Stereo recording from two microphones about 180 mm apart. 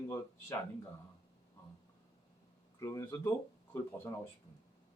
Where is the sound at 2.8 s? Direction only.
15° left (ahead or behind).